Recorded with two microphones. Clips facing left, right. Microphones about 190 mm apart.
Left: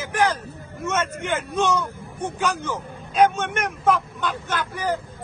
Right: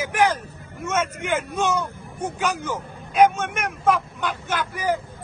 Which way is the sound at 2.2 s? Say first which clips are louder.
Even; 10° right (ahead or behind).